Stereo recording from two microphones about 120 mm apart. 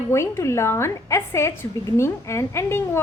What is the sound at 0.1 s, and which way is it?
A woman's voice, 25° left (ahead or behind).